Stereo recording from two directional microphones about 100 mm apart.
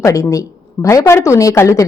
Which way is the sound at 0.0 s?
35° left (ahead or behind).